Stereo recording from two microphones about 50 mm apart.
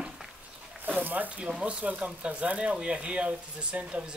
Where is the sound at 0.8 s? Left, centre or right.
Right.